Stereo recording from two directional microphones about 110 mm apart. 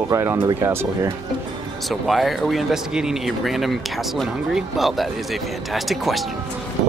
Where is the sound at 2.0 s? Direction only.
Centre (ahead or behind).